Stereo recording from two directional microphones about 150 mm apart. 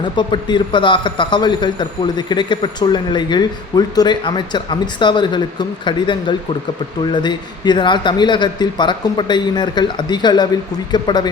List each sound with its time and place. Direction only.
0.0 s a man's voice: 30° left (ahead or behind)